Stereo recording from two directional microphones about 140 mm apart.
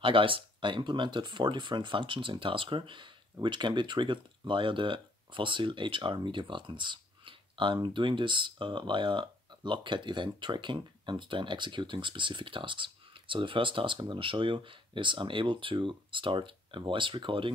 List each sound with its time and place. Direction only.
0.0 s speech: 40° right (ahead or behind)